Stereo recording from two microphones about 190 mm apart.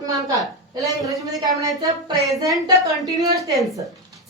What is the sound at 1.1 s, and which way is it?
Speech, centre (ahead or behind).